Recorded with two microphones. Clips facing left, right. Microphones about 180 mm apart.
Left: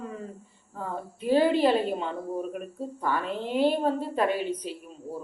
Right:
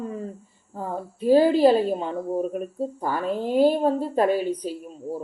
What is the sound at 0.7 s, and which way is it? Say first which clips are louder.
Speech: right 4 dB; 40° right (ahead or behind).